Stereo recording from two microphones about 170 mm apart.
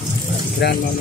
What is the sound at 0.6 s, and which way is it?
Speech, 75° left (ahead or behind).